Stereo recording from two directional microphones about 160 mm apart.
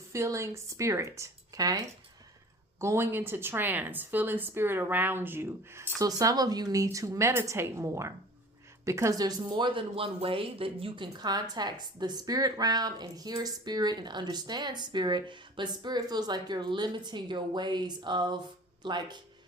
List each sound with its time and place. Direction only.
0.1 s a woman's voice: 20° right (ahead or behind)